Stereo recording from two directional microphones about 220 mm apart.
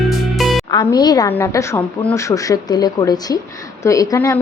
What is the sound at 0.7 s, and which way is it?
A woman's voice, 20° left (ahead or behind).